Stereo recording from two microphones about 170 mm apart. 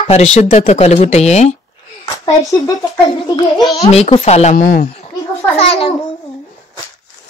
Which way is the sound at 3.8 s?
40° left (ahead or behind).